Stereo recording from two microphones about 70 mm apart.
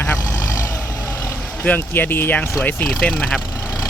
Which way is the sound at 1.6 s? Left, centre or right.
Left.